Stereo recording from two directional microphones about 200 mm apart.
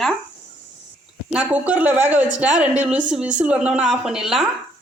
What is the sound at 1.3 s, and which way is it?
A woman's voice, 5° right (ahead or behind).